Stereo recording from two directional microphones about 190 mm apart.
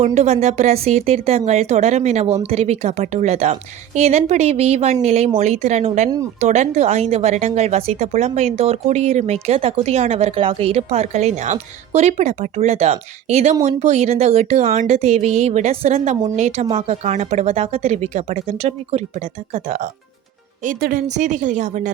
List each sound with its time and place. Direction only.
0.0 s a woman's voice: 35° right (ahead or behind)